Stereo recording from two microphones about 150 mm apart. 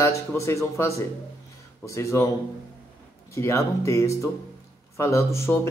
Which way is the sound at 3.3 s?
20° left (ahead or behind).